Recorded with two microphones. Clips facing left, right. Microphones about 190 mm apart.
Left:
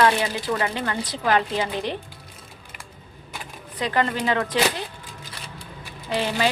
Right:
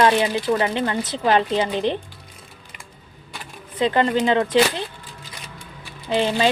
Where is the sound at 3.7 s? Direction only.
25° right (ahead or behind).